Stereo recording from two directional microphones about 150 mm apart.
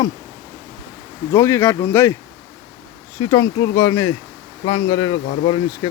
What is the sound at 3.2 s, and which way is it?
Speech, 20° left (ahead or behind).